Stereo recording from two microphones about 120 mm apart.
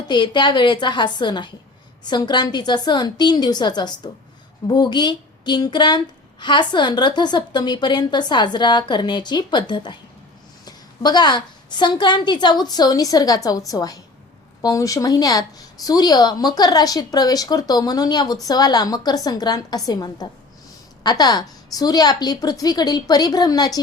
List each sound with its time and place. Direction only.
0.1 s speech: 40° left (ahead or behind)